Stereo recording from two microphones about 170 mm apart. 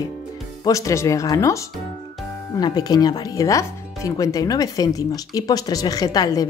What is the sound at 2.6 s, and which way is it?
Speech, 25° left (ahead or behind).